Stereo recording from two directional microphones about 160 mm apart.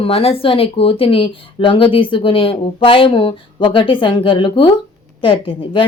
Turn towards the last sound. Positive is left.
turn(degrees=30)  # may be behind; listen again after turning